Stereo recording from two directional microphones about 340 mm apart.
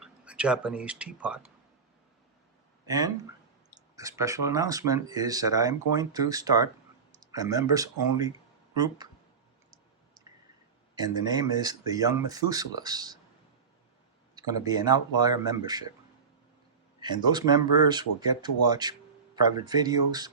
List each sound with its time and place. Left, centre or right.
0.0 s speech: centre
2.8 s speech: centre
10.9 s speech: centre
14.3 s speech: centre
17.0 s speech: centre